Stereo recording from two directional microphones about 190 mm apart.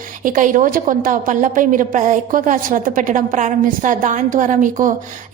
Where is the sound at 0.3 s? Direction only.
45° right (ahead or behind).